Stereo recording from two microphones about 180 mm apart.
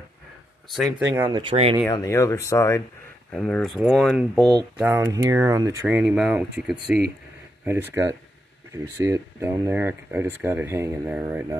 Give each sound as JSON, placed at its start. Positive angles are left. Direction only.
{"t": 0.7, "sound": "speech", "side_deg": 0}
{"t": 1.0, "sound": "speech", "side_deg": -15}
{"t": 1.4, "sound": "speech", "side_deg": -30}
{"t": 1.9, "sound": "speech", "side_deg": 15}
{"t": 3.3, "sound": "speech", "side_deg": 5}